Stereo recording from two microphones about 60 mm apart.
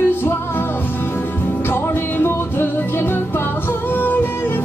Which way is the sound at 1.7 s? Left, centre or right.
Left.